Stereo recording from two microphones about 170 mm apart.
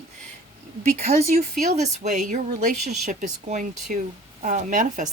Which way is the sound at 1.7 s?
40° right (ahead or behind).